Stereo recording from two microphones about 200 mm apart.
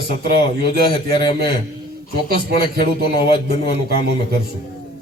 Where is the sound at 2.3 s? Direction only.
50° right (ahead or behind).